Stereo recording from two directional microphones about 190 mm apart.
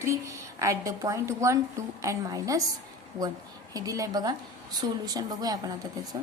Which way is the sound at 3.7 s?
20° right (ahead or behind).